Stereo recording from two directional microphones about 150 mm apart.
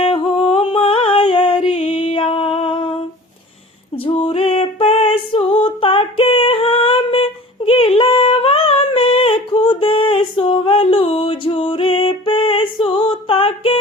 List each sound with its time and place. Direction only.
0.0 s a sound: 35° left (ahead or behind)
1.9 s music: 35° left (ahead or behind)
3.9 s female singing: 35° left (ahead or behind)